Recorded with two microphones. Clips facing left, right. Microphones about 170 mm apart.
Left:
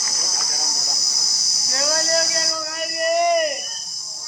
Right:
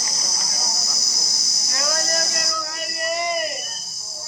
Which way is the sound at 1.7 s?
30° left (ahead or behind).